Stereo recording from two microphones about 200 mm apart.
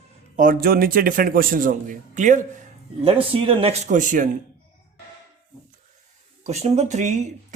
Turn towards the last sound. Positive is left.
turn(degrees=-35)  # may be behind; listen again after turning